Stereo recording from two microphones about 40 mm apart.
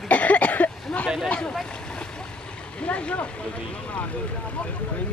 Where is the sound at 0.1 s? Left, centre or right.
Left.